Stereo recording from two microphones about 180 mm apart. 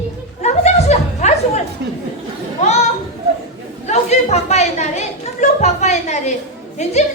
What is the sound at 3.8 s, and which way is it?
A woman's voice, 40° left (ahead or behind).